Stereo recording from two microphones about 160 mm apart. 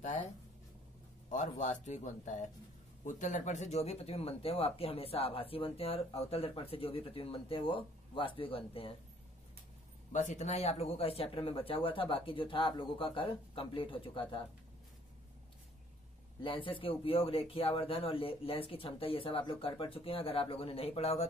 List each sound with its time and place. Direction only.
0.0 s speech: 45° left (ahead or behind)
1.3 s speech: 45° left (ahead or behind)
10.1 s speech: 45° left (ahead or behind)
16.4 s speech: 35° left (ahead or behind)